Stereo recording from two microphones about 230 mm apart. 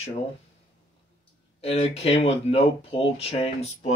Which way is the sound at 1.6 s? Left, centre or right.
Left.